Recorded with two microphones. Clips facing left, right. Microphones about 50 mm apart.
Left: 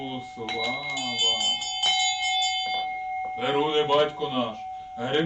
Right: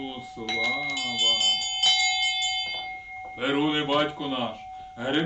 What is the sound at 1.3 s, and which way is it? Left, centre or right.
Speech, right.